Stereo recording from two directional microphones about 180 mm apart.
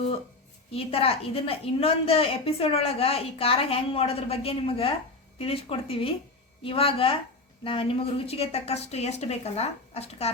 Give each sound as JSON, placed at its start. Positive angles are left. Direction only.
{"t": 0.7, "sound": "a woman's voice", "side_deg": 30}